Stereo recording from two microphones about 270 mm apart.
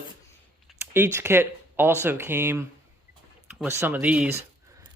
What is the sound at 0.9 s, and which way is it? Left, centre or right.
Speech, centre.